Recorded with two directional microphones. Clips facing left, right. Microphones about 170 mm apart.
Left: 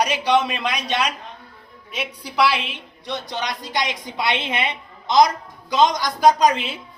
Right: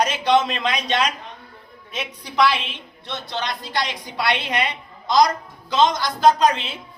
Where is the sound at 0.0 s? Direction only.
10° left (ahead or behind).